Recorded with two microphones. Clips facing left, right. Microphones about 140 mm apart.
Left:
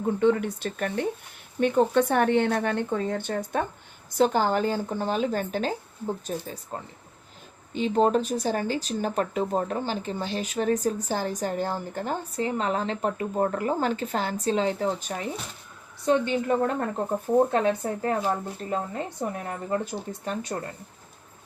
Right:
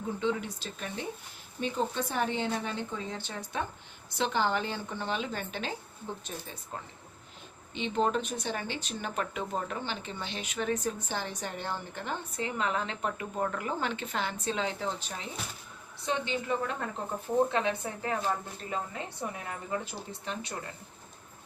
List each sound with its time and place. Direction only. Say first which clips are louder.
0.0 s speech: left 9 dB; 55° left (ahead or behind); by 6.6 s 40° left (ahead or behind)
7.7 s speech: left 7 dB; 40° left (ahead or behind)